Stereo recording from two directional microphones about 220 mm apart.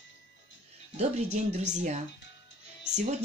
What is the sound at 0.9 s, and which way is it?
Speech, 30° right (ahead or behind).